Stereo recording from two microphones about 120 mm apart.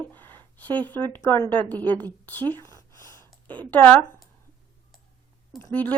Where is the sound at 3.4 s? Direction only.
15° left (ahead or behind).